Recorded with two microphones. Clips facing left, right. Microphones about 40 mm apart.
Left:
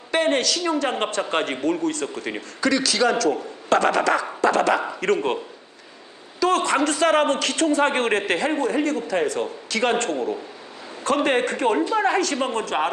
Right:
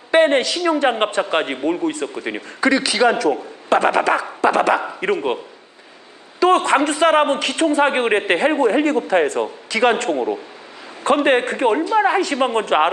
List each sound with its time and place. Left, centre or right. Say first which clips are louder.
0.1 s a man's voice: right 6 dB; right
6.4 s a man's voice: right 5 dB; right
9.7 s a man's voice: right 5 dB; centre
11.9 s a man's voice: right 4 dB; centre; by 12.9 s right